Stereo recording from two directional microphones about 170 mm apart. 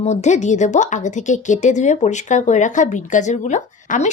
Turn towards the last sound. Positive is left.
turn(degrees=45)  # may be behind; listen again after turning